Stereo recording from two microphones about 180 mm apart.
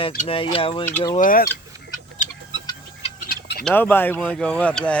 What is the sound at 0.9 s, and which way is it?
Speech, 10° left (ahead or behind).